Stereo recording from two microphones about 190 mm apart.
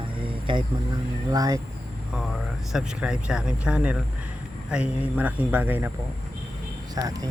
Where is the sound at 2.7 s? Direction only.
5° right (ahead or behind).